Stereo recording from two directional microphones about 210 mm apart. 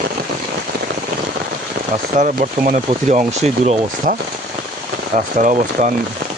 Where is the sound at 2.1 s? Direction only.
35° right (ahead or behind).